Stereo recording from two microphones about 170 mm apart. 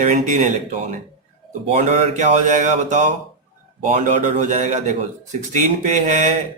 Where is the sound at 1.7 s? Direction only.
45° right (ahead or behind).